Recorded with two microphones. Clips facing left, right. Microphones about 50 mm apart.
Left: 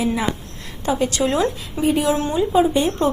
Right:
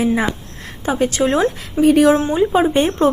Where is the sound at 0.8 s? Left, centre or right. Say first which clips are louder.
Right 3 dB; right.